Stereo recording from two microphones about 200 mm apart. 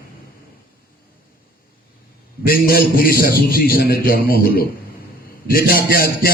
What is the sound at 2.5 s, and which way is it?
Speech, 45° left (ahead or behind).